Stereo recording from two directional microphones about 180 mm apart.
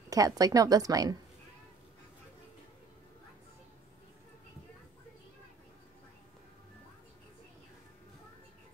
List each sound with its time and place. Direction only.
0.1 s a woman's voice: 20° right (ahead or behind)